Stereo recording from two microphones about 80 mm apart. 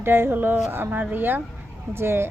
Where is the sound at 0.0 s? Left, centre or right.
Right.